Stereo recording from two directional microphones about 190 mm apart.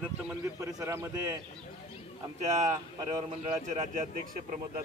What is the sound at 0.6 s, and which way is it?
Speech, 15° right (ahead or behind).